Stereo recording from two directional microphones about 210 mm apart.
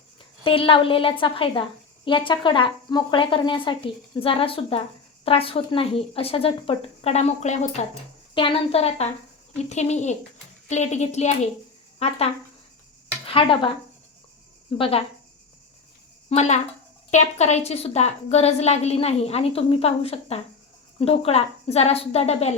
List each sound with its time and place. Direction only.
0.4 s a woman's voice: 25° left (ahead or behind)
14.8 s speech: 25° left (ahead or behind)
16.3 s a woman's voice: 35° left (ahead or behind)